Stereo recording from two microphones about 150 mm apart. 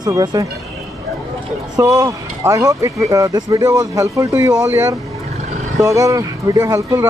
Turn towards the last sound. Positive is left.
turn(degrees=-25)  # may be behind; listen again after turning